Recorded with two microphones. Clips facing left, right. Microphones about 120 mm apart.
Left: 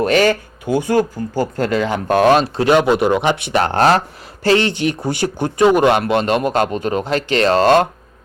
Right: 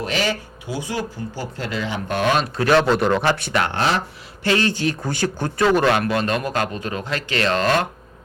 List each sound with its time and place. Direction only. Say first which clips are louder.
0.0 s speech: left 9 dB; 50° left (ahead or behind)
2.6 s speech: left 3 dB; 15° left (ahead or behind)
3.6 s speech: left 11 dB; 40° left (ahead or behind)
4.4 s speech: left 5 dB; 25° left (ahead or behind)